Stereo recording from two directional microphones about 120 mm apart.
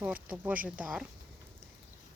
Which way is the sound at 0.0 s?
10° right (ahead or behind).